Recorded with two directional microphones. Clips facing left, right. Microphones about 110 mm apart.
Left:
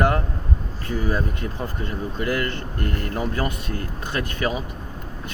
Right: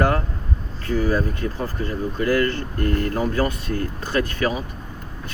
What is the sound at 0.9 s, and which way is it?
Speech, 20° left (ahead or behind).